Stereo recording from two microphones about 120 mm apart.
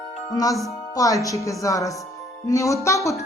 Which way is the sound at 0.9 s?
30° left (ahead or behind).